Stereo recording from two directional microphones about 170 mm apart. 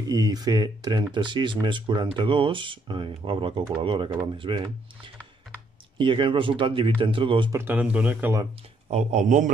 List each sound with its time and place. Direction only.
0.0 s speech: 20° right (ahead or behind)
7.5 s speech: 10° right (ahead or behind)
8.9 s a man's voice: 45° right (ahead or behind)